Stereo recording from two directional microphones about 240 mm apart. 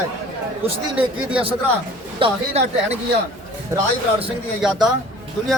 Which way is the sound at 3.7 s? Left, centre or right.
Centre.